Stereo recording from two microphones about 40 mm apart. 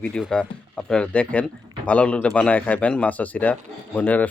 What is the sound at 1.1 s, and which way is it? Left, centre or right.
Speech, left.